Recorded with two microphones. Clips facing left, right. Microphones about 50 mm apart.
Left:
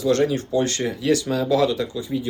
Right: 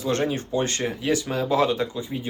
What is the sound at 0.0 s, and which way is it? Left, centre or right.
Speech, right.